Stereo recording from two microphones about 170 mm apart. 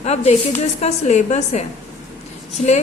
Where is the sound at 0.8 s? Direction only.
45° left (ahead or behind).